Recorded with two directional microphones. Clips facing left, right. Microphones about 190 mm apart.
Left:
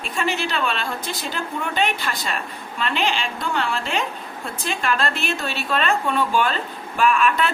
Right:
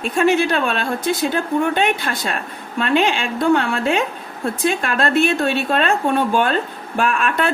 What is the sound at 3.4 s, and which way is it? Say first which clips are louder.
Speech: right 11 dB; 55° right (ahead or behind).